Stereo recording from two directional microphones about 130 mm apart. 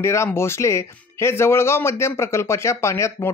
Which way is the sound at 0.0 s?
20° left (ahead or behind).